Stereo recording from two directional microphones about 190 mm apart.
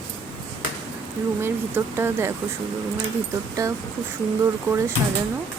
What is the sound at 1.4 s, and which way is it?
Speech, 10° right (ahead or behind).